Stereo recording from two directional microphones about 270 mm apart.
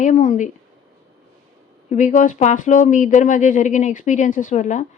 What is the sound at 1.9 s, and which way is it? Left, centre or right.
A woman's voice, left.